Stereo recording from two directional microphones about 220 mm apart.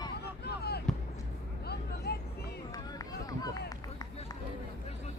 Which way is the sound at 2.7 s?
15° left (ahead or behind).